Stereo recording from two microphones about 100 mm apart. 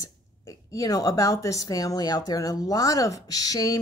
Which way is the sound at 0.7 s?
35° left (ahead or behind).